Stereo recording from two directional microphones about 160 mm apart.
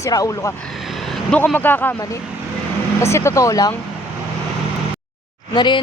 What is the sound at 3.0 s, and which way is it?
Speech, 15° left (ahead or behind).